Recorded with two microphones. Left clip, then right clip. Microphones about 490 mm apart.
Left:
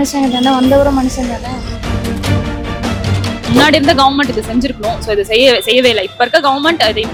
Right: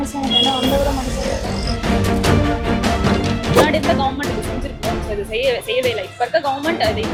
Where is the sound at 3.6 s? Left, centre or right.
Left.